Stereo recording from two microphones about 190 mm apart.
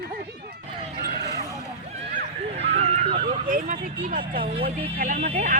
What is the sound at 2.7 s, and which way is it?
Neigh, 30° right (ahead or behind).